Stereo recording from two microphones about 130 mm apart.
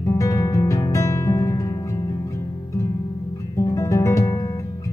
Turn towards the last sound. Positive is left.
turn(degrees=25)  # may be behind; listen again after turning